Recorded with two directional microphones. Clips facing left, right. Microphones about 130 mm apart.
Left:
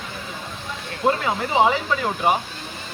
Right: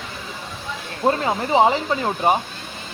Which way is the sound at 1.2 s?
30° right (ahead or behind).